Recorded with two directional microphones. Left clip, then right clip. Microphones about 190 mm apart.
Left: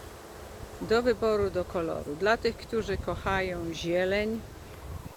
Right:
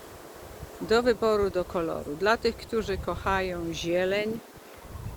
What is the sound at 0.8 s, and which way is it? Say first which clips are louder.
Speech: right 2 dB; 10° right (ahead or behind).